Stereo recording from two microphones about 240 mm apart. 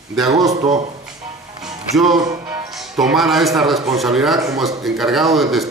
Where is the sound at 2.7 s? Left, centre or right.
Centre.